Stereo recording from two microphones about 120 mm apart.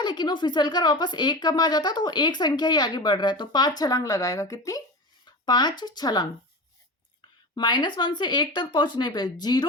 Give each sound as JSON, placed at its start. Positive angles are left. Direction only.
{"t": 0.0, "sound": "speech", "side_deg": 40}
{"t": 7.5, "sound": "speech", "side_deg": 40}